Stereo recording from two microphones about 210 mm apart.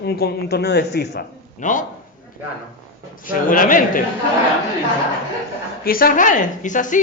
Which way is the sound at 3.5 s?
40° left (ahead or behind).